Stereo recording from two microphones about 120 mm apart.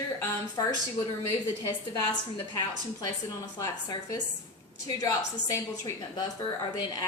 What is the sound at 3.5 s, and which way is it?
A woman's voice, 30° left (ahead or behind).